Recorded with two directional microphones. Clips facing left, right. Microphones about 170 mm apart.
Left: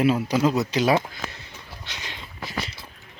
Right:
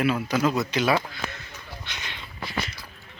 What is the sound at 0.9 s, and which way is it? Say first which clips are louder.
Speech: left 2 dB; 25° left (ahead or behind).